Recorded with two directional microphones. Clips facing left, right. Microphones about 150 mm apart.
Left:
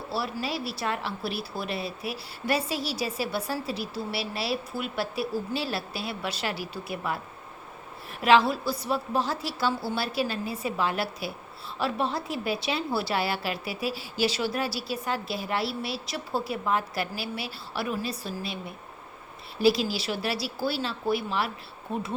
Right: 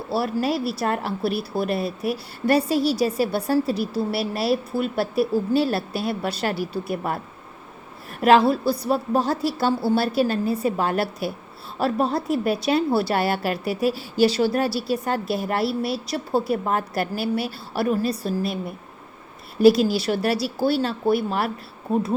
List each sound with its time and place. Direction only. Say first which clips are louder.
0.1 s a woman's voice: right 8 dB; 50° right (ahead or behind)
8.2 s a woman's voice: right 5 dB; 40° right (ahead or behind)
19.6 s a woman's voice: right 8 dB; 50° right (ahead or behind)